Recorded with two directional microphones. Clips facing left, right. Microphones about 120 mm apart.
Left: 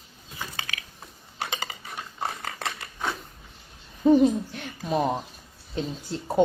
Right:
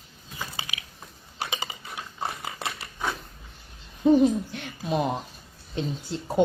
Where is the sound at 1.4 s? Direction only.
15° right (ahead or behind).